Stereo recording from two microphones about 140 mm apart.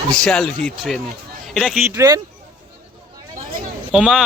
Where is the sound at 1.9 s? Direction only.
25° right (ahead or behind).